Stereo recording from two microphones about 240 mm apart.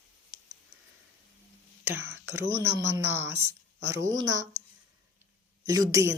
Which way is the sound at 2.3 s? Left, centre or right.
Centre.